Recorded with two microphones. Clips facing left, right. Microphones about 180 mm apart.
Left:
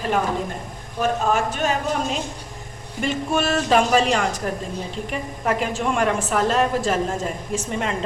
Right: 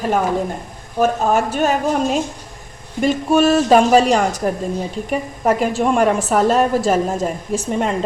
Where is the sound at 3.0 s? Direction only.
40° right (ahead or behind).